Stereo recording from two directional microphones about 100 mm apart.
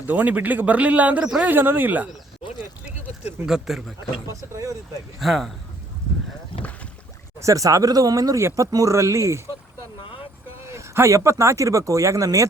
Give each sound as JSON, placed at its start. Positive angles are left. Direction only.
{"t": 0.1, "sound": "speech", "side_deg": -15}
{"t": 3.4, "sound": "speech", "side_deg": -5}
{"t": 4.3, "sound": "speech", "side_deg": -30}
{"t": 5.2, "sound": "speech", "side_deg": 0}
{"t": 7.3, "sound": "speech", "side_deg": -35}
{"t": 10.0, "sound": "vehicle", "side_deg": 65}
{"t": 10.6, "sound": "speech", "side_deg": -25}